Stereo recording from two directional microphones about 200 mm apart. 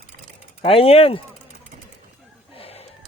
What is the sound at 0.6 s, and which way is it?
Speech, 30° left (ahead or behind).